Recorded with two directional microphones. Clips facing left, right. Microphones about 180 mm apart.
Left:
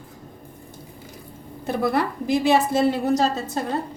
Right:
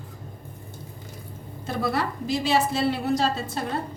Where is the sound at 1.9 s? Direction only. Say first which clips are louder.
Left 5 dB; 55° left (ahead or behind).